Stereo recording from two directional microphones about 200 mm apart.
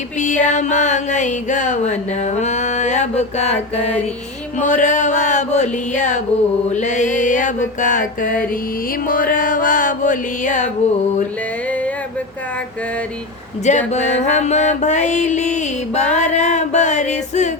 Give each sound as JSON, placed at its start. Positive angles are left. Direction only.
{"t": 0.2, "sound": "a sound", "side_deg": 40}
{"t": 4.5, "sound": "music", "side_deg": 40}
{"t": 13.7, "sound": "music", "side_deg": 35}